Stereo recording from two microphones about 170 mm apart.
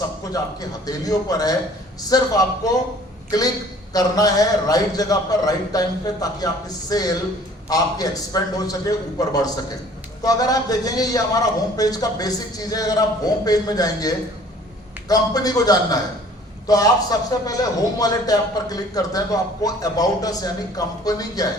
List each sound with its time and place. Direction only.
0.3 s a man's voice: 20° left (ahead or behind)